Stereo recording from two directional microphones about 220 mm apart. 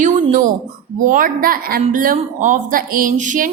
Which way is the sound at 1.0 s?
40° right (ahead or behind).